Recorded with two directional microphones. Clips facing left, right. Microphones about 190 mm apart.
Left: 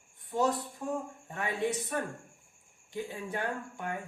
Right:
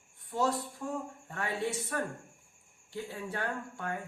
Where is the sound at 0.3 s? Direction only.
20° left (ahead or behind).